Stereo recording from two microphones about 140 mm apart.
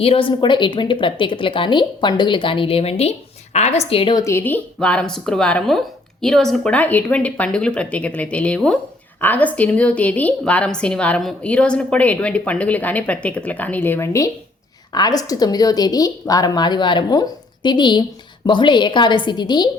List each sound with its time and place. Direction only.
0.0 s a woman's voice: 40° left (ahead or behind)
4.1 s a woman's voice: 20° left (ahead or behind)